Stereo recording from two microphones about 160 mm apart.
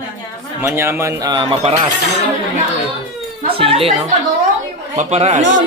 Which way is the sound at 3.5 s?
35° right (ahead or behind).